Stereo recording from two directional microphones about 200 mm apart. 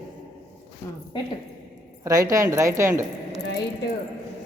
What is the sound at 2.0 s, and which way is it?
Speech, 15° right (ahead or behind).